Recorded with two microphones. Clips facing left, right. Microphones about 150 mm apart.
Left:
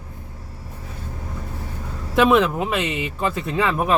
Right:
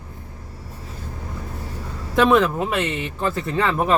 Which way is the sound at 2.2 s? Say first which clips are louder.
Even; 5° left (ahead or behind).